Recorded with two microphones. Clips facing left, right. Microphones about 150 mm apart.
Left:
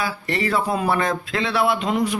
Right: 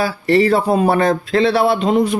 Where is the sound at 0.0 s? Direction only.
35° right (ahead or behind).